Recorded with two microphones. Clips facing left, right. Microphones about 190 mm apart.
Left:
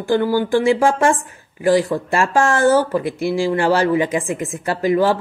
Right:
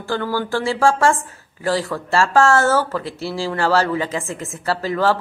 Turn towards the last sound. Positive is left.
turn(degrees=15)  # may be behind; listen again after turning